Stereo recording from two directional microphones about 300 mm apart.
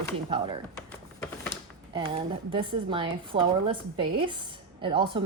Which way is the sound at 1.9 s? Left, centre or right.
Centre.